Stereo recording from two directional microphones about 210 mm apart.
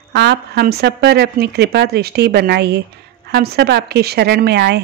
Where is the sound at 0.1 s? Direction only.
50° right (ahead or behind).